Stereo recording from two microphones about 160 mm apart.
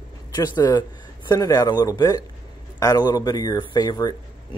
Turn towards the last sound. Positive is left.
turn(degrees=25)  # may be behind; listen again after turning